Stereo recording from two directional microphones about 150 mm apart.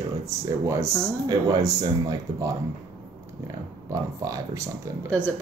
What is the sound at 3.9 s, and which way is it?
Speech, 20° right (ahead or behind).